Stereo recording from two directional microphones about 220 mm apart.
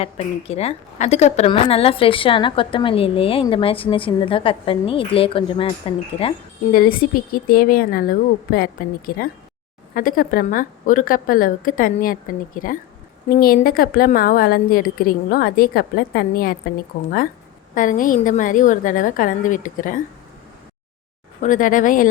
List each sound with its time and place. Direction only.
0.0 s a woman's voice: 25° left (ahead or behind)
6.7 s a woman's voice: 40° left (ahead or behind)
21.4 s a woman's voice: 35° left (ahead or behind)